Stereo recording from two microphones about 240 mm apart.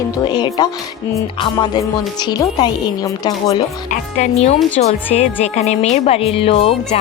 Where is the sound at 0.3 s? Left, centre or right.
Centre.